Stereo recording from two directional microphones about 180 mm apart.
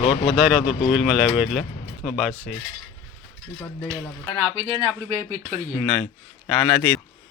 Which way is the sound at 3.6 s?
10° left (ahead or behind).